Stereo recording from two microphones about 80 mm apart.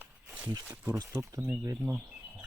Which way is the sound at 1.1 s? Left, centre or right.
Right.